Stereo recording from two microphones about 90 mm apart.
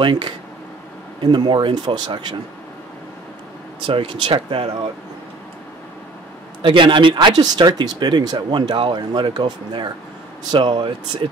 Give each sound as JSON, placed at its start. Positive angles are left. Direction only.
{"t": 0.0, "sound": "speech", "side_deg": -60}
{"t": 3.8, "sound": "speech", "side_deg": -65}
{"t": 6.6, "sound": "speech", "side_deg": -65}